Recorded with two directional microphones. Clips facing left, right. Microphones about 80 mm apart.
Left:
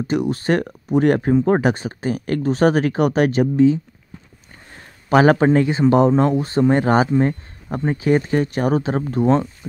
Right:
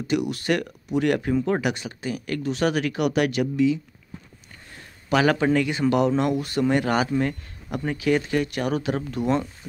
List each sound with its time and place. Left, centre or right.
0.0 s speech: left
5.1 s speech: left